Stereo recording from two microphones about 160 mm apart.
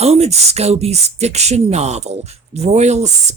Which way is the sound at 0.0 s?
40° right (ahead or behind).